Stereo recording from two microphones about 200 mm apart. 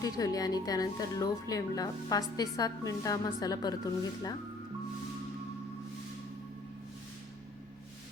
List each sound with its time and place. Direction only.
0.0 s speech: 20° left (ahead or behind)